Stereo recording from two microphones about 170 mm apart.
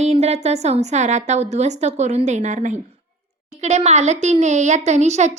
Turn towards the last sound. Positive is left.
turn(degrees=-40)  # may be behind; listen again after turning